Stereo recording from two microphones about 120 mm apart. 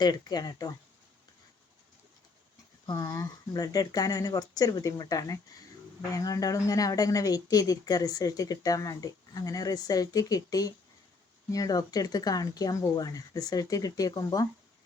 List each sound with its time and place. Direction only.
0.0 s speech: 35° left (ahead or behind)
2.8 s speech: 35° left (ahead or behind)